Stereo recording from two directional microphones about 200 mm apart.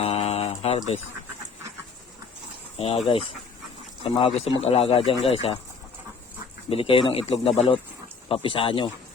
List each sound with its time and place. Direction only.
0.0 s a sound: 30° left (ahead or behind)
2.7 s speech: 30° left (ahead or behind)
4.0 s speech: 30° left (ahead or behind)
6.7 s speech: 25° left (ahead or behind)